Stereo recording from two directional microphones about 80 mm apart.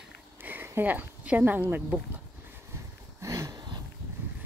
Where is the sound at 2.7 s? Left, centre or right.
Right.